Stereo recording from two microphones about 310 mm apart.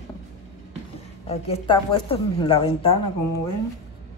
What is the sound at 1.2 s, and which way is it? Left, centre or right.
A woman's voice, centre.